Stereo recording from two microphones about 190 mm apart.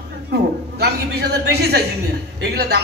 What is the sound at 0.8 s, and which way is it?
Speech, 60° right (ahead or behind).